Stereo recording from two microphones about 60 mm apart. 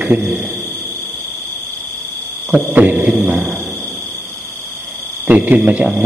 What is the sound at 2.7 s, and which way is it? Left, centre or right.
Mantra, right.